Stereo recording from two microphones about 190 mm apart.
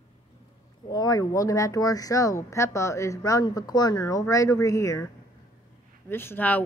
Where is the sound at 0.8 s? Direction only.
20° left (ahead or behind).